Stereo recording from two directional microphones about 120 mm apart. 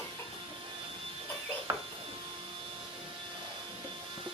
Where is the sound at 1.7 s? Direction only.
25° right (ahead or behind).